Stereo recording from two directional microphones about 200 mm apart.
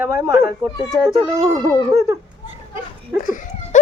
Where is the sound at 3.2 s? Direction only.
40° left (ahead or behind).